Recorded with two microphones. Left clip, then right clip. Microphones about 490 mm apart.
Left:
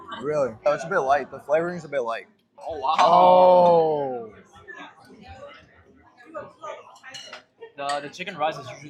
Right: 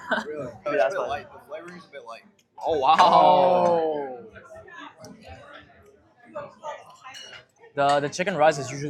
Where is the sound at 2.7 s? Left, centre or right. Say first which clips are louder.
Right 5 dB; centre.